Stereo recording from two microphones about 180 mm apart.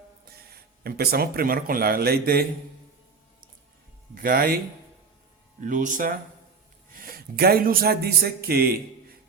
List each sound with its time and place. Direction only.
0.4 s speech: 60° right (ahead or behind)
4.1 s speech: 55° right (ahead or behind)